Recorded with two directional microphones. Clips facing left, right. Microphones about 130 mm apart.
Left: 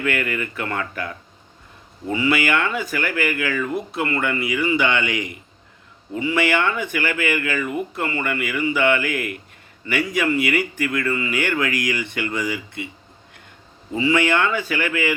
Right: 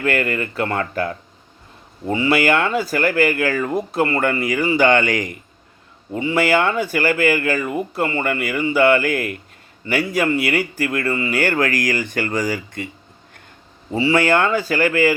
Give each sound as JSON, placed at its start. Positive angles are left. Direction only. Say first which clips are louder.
{"t": 0.0, "sound": "speech", "louder": "right 3 dB", "side_deg": -40}
{"t": 6.1, "sound": "speech", "louder": "right 3 dB", "side_deg": -35}
{"t": 13.9, "sound": "speech", "louder": "right 3 dB", "side_deg": -35}